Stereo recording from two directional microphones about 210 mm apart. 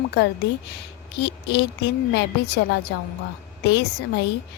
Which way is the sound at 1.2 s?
55° left (ahead or behind).